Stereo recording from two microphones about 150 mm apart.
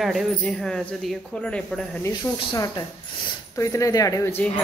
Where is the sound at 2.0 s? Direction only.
25° left (ahead or behind).